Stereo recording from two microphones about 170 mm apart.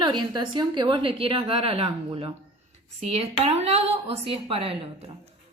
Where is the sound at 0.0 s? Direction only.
25° right (ahead or behind).